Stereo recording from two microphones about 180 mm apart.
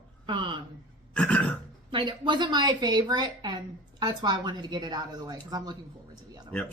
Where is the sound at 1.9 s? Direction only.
25° right (ahead or behind).